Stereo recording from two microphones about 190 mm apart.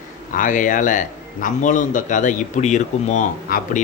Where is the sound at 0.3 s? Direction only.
45° left (ahead or behind).